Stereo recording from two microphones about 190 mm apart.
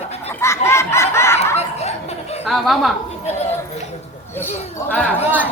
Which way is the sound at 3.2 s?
35° left (ahead or behind).